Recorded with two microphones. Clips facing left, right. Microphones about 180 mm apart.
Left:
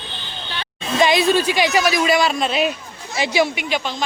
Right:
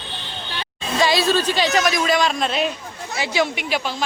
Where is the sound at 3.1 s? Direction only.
15° left (ahead or behind).